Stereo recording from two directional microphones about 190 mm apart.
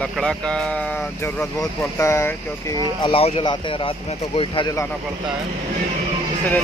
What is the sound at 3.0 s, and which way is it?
Speech, 30° left (ahead or behind).